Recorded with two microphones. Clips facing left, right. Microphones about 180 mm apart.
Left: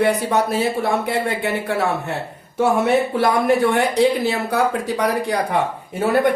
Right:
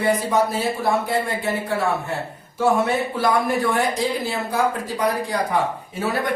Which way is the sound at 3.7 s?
70° left (ahead or behind).